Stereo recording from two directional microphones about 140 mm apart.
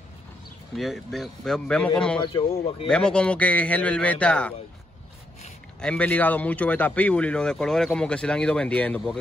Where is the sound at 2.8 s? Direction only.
5° left (ahead or behind).